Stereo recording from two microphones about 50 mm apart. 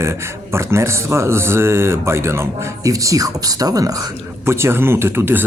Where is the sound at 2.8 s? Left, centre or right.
Right.